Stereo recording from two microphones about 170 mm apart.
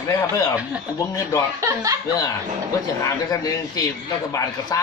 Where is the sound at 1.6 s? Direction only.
20° right (ahead or behind).